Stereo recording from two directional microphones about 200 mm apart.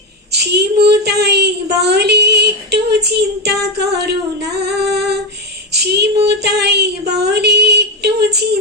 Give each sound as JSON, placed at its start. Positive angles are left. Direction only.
{"t": 0.3, "sound": "child singing", "side_deg": -55}
{"t": 4.6, "sound": "female singing", "side_deg": -55}
{"t": 5.7, "sound": "child singing", "side_deg": -55}